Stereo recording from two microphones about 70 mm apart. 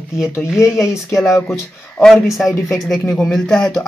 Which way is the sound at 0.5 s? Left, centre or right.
Left.